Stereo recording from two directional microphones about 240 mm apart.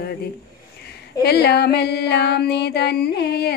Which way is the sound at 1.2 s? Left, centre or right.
Left.